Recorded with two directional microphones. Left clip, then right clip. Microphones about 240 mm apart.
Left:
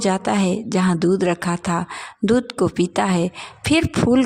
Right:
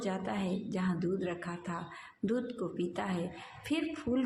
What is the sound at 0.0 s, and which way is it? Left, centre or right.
Speech, left.